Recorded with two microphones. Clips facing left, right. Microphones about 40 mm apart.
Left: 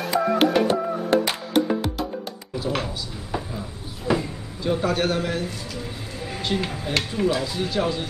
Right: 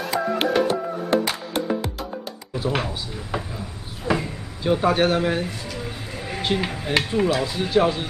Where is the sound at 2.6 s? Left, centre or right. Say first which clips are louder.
Right 2 dB; centre.